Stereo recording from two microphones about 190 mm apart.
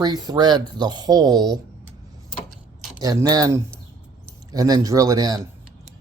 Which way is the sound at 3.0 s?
20° right (ahead or behind).